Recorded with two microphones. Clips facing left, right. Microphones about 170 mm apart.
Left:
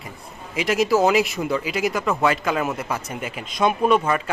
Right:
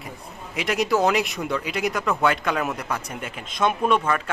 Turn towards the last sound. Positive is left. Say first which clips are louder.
# left 3 dB
turn(degrees=10)  # may be behind; listen again after turning